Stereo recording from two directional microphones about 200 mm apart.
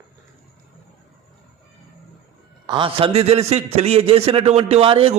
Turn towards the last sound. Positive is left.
turn(degrees=-30)  # may be behind; listen again after turning